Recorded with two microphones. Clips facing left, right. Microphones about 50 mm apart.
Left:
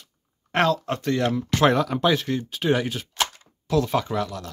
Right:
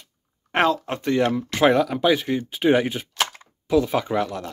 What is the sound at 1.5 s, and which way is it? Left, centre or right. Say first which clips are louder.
Speech: right 2 dB; centre.